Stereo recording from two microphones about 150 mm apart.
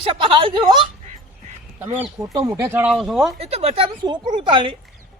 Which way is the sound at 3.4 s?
45° right (ahead or behind).